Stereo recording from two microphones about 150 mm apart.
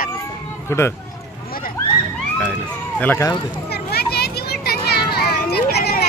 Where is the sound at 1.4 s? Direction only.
75° left (ahead or behind).